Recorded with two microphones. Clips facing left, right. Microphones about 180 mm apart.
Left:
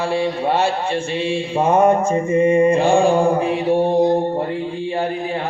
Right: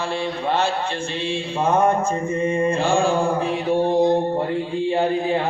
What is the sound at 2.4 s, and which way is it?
Mantra, 15° left (ahead or behind).